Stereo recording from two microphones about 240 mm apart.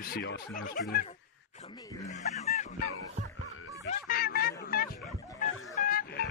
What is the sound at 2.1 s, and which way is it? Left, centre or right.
Speech, left.